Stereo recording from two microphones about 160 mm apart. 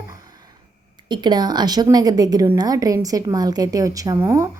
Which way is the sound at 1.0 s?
30° right (ahead or behind).